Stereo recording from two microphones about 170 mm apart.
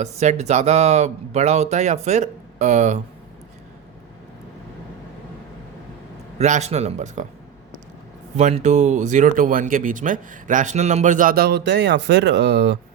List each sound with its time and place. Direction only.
0.0 s speech: 40° right (ahead or behind)
6.4 s speech: 40° right (ahead or behind)
8.4 s speech: 45° right (ahead or behind); by 12.7 s 85° right